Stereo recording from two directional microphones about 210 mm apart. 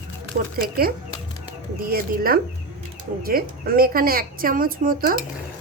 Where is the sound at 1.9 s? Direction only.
45° right (ahead or behind).